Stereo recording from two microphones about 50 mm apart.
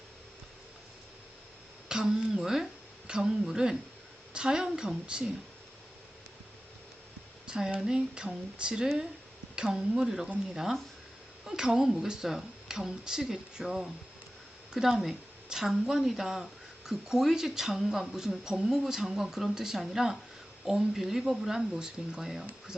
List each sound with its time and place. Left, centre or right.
1.9 s speech: centre
7.4 s a sound: centre
7.8 s a woman's voice: centre